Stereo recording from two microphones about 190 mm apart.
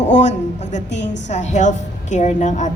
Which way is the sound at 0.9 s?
70° left (ahead or behind).